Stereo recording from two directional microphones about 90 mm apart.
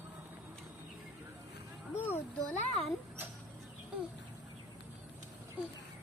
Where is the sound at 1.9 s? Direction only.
25° left (ahead or behind).